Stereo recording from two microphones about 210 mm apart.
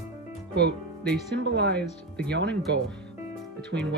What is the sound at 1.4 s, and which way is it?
Speech, 55° right (ahead or behind).